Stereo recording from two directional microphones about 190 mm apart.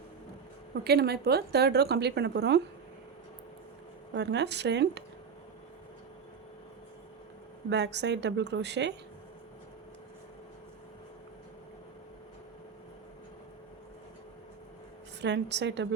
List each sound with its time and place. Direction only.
0.9 s a woman's voice: 60° right (ahead or behind)
4.1 s a woman's voice: 65° right (ahead or behind)
7.7 s a woman's voice: 65° right (ahead or behind)
15.2 s a woman's voice: 65° right (ahead or behind)